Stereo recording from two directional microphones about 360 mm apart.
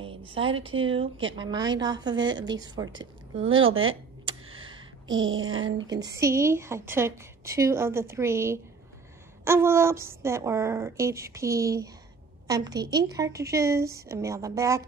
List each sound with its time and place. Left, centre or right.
0.3 s a woman's voice: centre
3.4 s a sound: right
5.9 s a woman's voice: centre